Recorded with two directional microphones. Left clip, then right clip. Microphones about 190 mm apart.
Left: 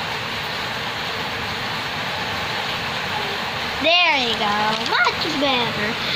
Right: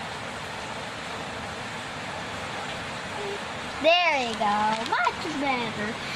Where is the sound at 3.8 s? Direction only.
45° right (ahead or behind).